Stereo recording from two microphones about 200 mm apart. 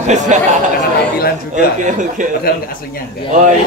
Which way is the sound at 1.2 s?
50° left (ahead or behind).